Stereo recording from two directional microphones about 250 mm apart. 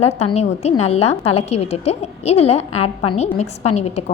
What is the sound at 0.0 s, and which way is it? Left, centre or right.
A woman's voice, left.